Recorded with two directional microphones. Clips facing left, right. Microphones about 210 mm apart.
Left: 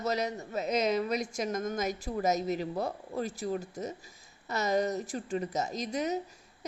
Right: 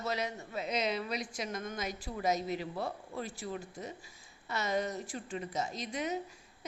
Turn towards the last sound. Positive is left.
turn(degrees=40)  # may be behind; listen again after turning